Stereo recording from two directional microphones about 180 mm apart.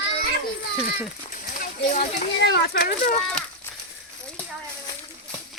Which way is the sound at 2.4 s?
65° left (ahead or behind).